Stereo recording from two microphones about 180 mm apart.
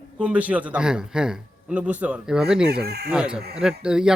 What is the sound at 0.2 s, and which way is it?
A man's voice, 5° right (ahead or behind).